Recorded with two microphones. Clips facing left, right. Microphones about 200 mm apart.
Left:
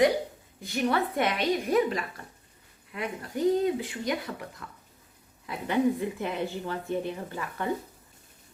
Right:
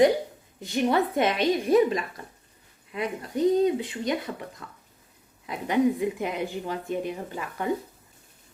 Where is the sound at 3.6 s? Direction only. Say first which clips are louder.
Right 4 dB; 25° right (ahead or behind).